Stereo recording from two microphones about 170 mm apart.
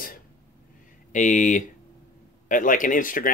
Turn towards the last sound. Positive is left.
turn(degrees=55)  # may be behind; listen again after turning